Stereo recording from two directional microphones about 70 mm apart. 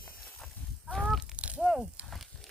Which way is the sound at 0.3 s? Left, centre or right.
Centre.